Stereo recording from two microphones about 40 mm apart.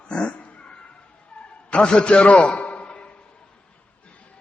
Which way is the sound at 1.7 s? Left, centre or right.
Left.